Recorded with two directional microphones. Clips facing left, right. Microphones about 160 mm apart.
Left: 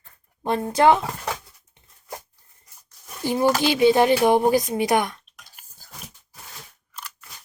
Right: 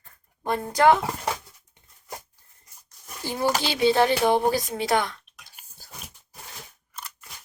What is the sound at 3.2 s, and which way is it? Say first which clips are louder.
Speech: left 5 dB; 15° left (ahead or behind).